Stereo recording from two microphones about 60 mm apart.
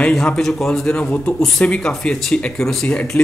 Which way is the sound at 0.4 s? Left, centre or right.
Centre.